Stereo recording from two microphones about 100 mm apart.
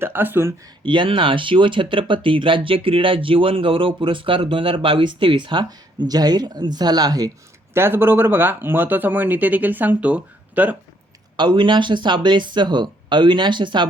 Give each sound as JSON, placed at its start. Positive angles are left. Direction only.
{"t": 0.0, "sound": "speech", "side_deg": -20}
{"t": 0.9, "sound": "speech", "side_deg": -55}
{"t": 7.7, "sound": "speech", "side_deg": -25}
{"t": 11.3, "sound": "speech", "side_deg": -50}